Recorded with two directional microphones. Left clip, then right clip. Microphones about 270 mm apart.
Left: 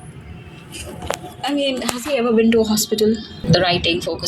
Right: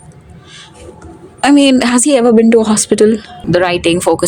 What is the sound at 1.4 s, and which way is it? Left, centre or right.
Speech, right.